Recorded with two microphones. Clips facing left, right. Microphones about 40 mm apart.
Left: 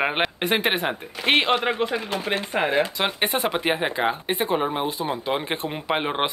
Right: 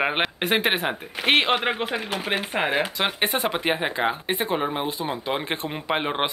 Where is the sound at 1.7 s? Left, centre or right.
Right.